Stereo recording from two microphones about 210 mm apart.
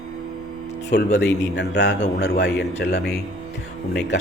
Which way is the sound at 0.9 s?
55° left (ahead or behind).